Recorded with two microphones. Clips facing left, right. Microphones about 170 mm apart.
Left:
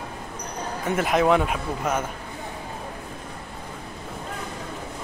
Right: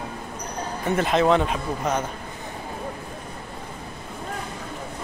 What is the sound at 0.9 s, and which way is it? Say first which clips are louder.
Speech: right 1 dB; 10° left (ahead or behind).